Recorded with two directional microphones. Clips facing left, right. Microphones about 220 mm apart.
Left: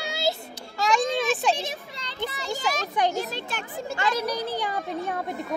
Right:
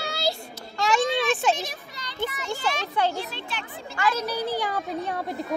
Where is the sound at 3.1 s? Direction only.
45° left (ahead or behind).